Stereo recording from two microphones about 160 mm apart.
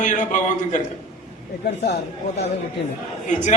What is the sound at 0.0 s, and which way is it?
Speech, 50° left (ahead or behind).